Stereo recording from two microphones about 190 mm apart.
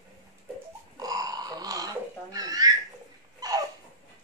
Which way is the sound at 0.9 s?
20° right (ahead or behind).